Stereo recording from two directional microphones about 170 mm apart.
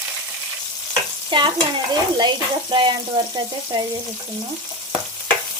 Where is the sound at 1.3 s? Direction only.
30° right (ahead or behind).